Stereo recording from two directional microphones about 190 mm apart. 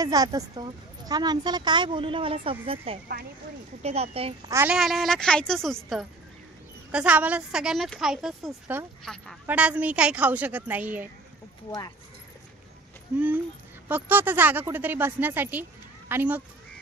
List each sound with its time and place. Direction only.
0.0 s speech: 20° right (ahead or behind)
4.5 s speech: 15° right (ahead or behind)
4.7 s a woman's voice: centre (ahead or behind)
6.9 s a woman's voice: 5° right (ahead or behind)
13.8 s speech: 10° right (ahead or behind)